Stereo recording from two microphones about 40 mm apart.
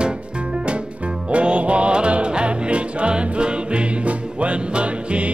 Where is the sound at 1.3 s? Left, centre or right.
Right.